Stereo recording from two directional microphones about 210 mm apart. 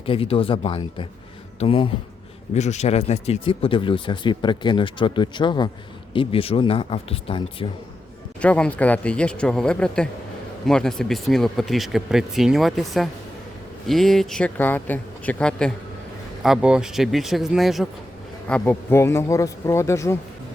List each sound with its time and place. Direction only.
0.0 s speech: 25° left (ahead or behind)
8.4 s speech: 5° left (ahead or behind)